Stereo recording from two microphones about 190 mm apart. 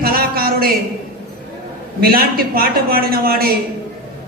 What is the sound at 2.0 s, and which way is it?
A man's voice, 50° right (ahead or behind).